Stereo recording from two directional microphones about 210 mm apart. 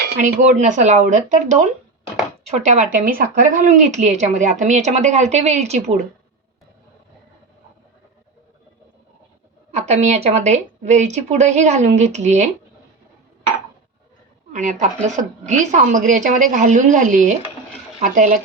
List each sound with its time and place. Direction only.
0.0 s a woman's voice: 35° right (ahead or behind)
9.7 s a woman's voice: 30° right (ahead or behind)
14.5 s a woman's voice: 35° right (ahead or behind)